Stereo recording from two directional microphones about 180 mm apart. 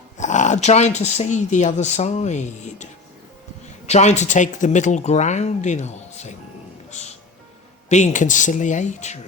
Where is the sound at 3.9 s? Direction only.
40° left (ahead or behind).